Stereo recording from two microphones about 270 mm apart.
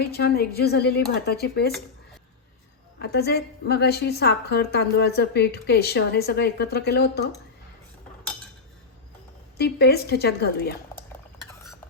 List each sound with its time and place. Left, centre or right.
0.0 s a woman's voice: left
3.0 s a woman's voice: left
9.6 s a woman's voice: left